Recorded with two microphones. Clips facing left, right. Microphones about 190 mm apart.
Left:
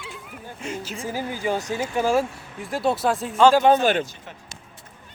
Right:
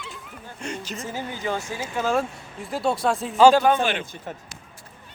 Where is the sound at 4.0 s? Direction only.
55° right (ahead or behind).